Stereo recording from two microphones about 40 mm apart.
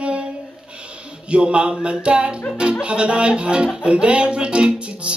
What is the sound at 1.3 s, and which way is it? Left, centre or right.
Music, right.